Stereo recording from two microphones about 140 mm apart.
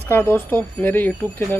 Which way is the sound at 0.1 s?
15° left (ahead or behind).